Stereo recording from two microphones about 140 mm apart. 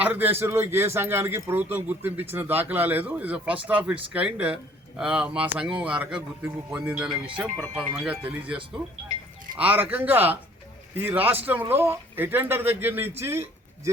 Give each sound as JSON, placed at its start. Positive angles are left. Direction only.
{"t": 0.0, "sound": "speech", "side_deg": -15}